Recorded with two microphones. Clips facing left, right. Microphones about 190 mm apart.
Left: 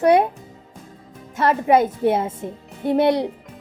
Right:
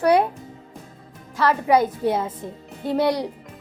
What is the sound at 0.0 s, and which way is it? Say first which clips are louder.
Speech: left 2 dB; 20° left (ahead or behind).